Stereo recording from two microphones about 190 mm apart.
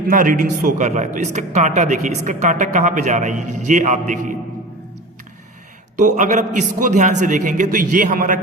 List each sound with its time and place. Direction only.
0.1 s a man's voice: 45° right (ahead or behind)
6.0 s a man's voice: 40° right (ahead or behind)